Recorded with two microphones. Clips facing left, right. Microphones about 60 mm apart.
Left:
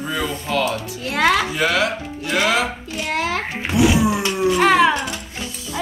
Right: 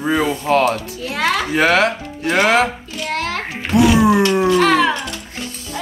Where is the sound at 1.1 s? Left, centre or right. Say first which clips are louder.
Left 2 dB; centre.